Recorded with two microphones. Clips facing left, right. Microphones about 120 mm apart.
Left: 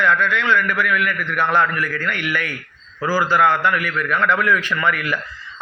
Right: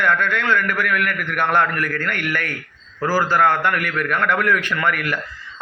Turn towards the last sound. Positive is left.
turn(degrees=-50)  # may be behind; listen again after turning